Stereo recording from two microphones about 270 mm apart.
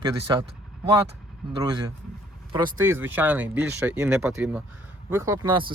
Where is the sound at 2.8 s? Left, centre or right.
Centre.